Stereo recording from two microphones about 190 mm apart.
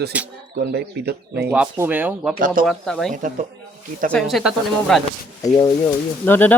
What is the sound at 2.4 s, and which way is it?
Speech, 45° right (ahead or behind).